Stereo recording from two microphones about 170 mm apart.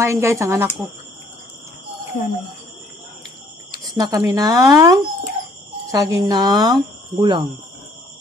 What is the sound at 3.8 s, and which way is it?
Speech, 20° right (ahead or behind).